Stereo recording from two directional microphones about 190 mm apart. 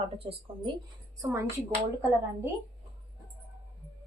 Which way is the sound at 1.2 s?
15° right (ahead or behind).